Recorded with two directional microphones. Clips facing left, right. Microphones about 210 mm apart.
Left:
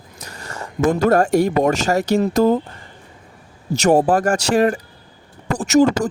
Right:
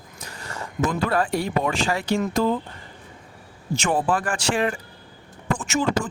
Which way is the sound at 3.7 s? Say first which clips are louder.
Left 8 dB; 40° left (ahead or behind).